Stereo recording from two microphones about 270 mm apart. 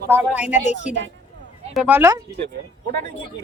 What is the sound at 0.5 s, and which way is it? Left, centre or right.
Speech, left.